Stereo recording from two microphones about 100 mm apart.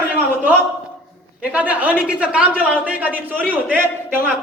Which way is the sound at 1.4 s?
15° right (ahead or behind).